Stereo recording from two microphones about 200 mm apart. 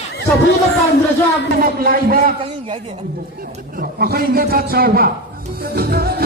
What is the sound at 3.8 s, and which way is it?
A man's voice, 50° right (ahead or behind).